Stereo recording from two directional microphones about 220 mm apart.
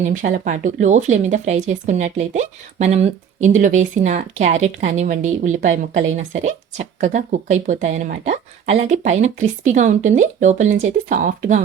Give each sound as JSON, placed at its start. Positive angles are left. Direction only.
{"t": 0.0, "sound": "speech", "side_deg": -35}